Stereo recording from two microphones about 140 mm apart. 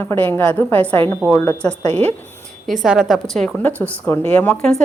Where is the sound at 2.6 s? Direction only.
Centre (ahead or behind).